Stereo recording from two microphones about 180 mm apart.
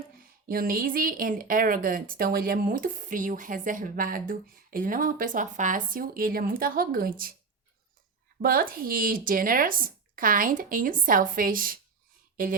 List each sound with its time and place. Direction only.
0.4 s speech: 55° right (ahead or behind)
8.4 s speech: 55° right (ahead or behind)